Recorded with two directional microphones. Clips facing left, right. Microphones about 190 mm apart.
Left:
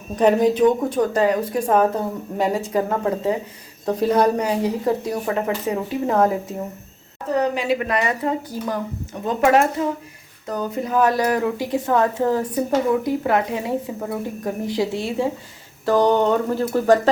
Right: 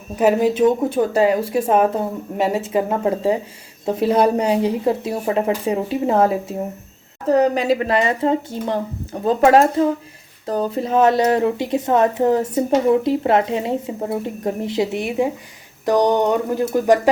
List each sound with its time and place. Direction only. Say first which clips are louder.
0.2 s speech: even; 5° right (ahead or behind)
1.6 s speech: even; 25° right (ahead or behind)
2.4 s speech: right 1 dB; 5° right (ahead or behind)
2.7 s speech: right 2 dB; 20° right (ahead or behind)
7.5 s speech: right 4 dB; 40° right (ahead or behind); by 17.0 s 15° right (ahead or behind)